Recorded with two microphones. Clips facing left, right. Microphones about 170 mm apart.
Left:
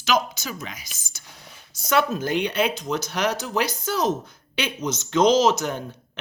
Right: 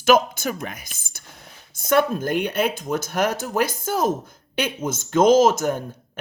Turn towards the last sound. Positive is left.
turn(degrees=-50)  # may be behind; listen again after turning